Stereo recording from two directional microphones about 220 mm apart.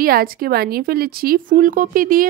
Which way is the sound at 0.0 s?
40° right (ahead or behind).